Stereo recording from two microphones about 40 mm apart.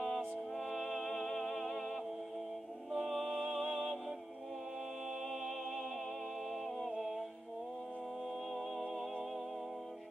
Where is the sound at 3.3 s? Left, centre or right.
Centre.